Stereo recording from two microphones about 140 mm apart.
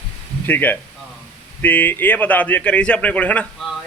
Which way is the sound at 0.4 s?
15° left (ahead or behind).